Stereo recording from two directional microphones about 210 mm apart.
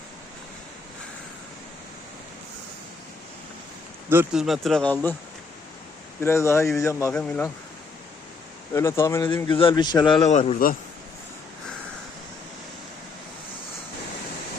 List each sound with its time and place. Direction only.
4.1 s speech: 5° right (ahead or behind)
6.1 s speech: 10° left (ahead or behind)
8.7 s a man's voice: 15° left (ahead or behind)
10.2 s a man's voice: 35° left (ahead or behind)